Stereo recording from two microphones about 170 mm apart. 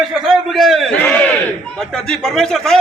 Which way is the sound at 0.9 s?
10° left (ahead or behind).